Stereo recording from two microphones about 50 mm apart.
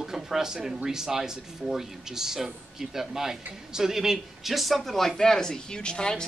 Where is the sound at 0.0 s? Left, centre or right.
Centre.